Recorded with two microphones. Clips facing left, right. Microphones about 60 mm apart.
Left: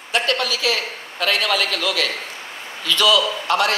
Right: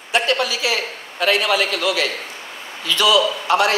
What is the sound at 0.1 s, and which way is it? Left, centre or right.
A woman's voice, centre.